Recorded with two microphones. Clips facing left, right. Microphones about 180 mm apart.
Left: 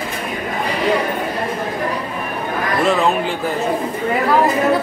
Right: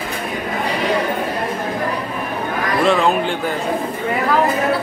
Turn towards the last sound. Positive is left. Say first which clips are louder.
# right 1 dB
turn(degrees=0)  # may be behind; listen again after turning